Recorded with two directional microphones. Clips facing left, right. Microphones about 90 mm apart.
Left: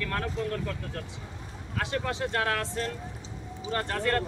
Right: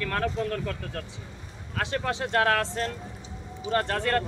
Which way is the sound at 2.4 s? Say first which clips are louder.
Right 8 dB; 40° right (ahead or behind).